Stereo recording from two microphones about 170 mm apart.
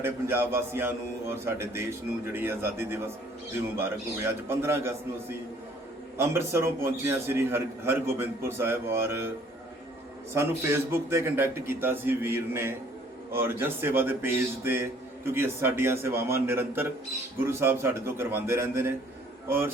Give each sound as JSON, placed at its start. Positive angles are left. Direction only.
{"t": 0.0, "sound": "speech", "side_deg": -15}
{"t": 6.1, "sound": "speech", "side_deg": -15}
{"t": 10.3, "sound": "speech", "side_deg": -15}